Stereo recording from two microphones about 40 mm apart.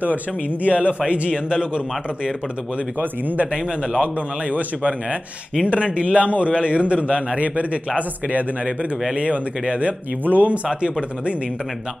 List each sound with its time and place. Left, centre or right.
0.0 s a man's voice: right
3.0 s speech: right
3.5 s speech: right
4.0 s a man's voice: right
10.2 s speech: right
10.7 s speech: right